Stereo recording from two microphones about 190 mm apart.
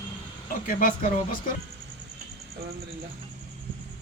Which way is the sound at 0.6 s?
50° left (ahead or behind).